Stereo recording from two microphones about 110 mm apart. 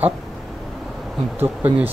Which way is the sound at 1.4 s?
15° right (ahead or behind).